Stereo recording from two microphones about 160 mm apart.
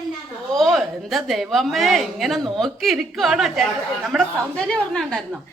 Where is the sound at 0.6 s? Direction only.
Centre (ahead or behind).